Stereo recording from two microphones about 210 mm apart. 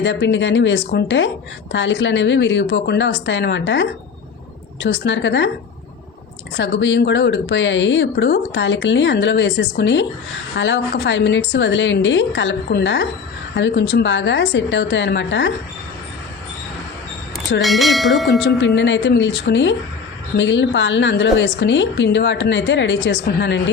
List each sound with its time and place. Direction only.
0.0 s speech: 60° left (ahead or behind)
6.6 s speech: 60° left (ahead or behind)
17.6 s speech: centre (ahead or behind)
18.3 s speech: 55° left (ahead or behind)